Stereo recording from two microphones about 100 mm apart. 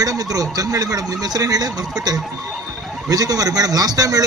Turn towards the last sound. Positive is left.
turn(degrees=-40)  # may be behind; listen again after turning